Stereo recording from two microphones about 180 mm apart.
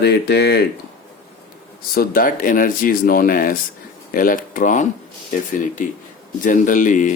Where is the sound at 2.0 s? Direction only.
50° left (ahead or behind).